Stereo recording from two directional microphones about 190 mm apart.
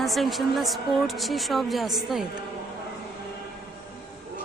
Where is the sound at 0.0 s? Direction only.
Centre (ahead or behind).